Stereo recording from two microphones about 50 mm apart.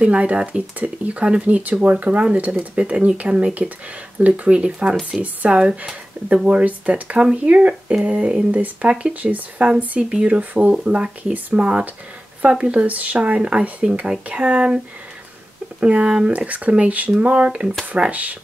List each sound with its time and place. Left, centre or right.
0.0 s speech: right
15.8 s speech: right